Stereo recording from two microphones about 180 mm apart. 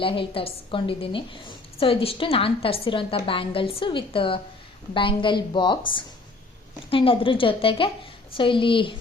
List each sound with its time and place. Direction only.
0.0 s a woman's voice: 30° left (ahead or behind)